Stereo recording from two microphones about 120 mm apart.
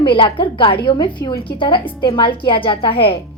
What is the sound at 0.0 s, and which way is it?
A woman's voice, 45° left (ahead or behind).